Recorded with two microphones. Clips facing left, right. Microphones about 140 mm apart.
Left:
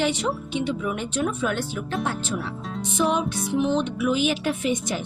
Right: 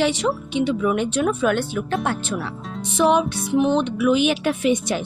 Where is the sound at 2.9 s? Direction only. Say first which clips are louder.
Right 6 dB; 75° right (ahead or behind).